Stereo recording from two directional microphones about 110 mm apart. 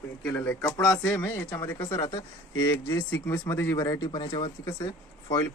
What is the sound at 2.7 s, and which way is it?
Speech, 25° left (ahead or behind).